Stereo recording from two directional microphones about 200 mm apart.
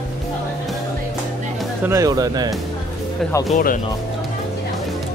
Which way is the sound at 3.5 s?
40° left (ahead or behind).